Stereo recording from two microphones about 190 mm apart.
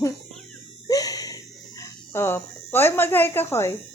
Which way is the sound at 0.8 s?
20° left (ahead or behind).